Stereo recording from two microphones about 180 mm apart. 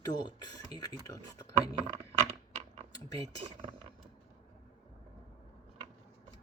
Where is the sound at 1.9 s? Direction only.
40° right (ahead or behind).